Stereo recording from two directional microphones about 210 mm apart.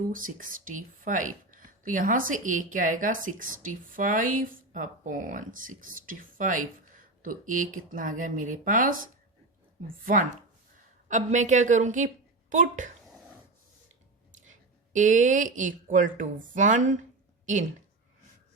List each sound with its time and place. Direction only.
0.1 s a woman's voice: 40° right (ahead or behind)
14.4 s a woman's voice: 35° right (ahead or behind)